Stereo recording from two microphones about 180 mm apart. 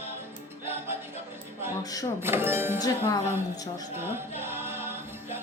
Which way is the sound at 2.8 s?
20° left (ahead or behind).